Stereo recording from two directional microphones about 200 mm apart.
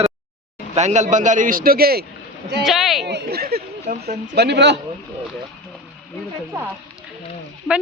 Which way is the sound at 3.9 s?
40° right (ahead or behind).